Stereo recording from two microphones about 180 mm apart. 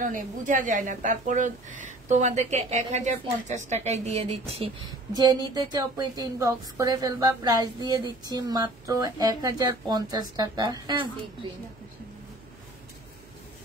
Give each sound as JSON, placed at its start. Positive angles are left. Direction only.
{"t": 0.0, "sound": "speech", "side_deg": -45}
{"t": 5.1, "sound": "a woman's voice", "side_deg": -20}